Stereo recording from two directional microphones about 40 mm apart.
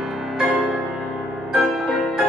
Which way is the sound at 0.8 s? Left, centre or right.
Centre.